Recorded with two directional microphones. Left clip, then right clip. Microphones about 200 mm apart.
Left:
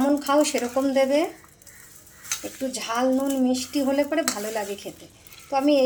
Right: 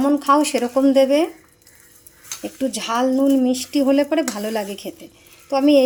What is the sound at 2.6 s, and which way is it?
Speech, 50° right (ahead or behind).